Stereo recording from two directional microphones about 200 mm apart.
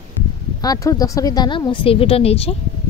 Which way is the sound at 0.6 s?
15° left (ahead or behind).